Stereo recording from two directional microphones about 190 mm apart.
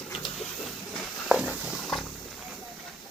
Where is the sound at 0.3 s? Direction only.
Centre (ahead or behind).